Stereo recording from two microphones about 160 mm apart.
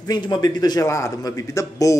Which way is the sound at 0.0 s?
25° left (ahead or behind).